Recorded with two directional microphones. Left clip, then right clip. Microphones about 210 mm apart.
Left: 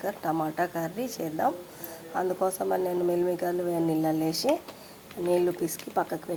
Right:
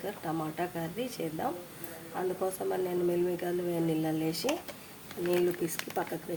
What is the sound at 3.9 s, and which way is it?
Speech, 15° left (ahead or behind).